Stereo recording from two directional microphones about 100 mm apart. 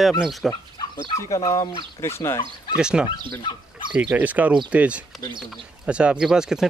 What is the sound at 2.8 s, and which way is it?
Speech, 10° right (ahead or behind).